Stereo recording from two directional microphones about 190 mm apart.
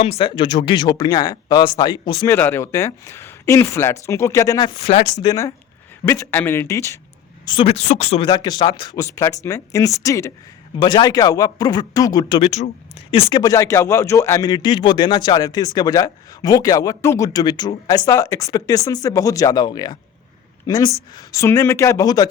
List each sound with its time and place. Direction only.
0.0 s speech: 30° left (ahead or behind)
4.8 s speech: 35° left (ahead or behind)
5.2 s speech: 20° left (ahead or behind)
7.4 s speech: 25° left (ahead or behind)
12.4 s speech: 35° left (ahead or behind)
13.4 s speech: 15° left (ahead or behind)